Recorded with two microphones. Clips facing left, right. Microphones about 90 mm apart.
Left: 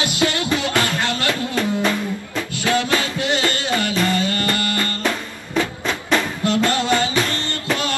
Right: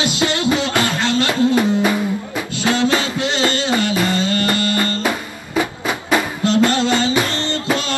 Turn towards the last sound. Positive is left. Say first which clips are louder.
# right 3 dB
turn(degrees=-20)  # may be behind; listen again after turning